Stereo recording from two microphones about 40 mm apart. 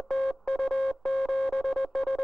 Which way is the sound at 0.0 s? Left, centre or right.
Centre.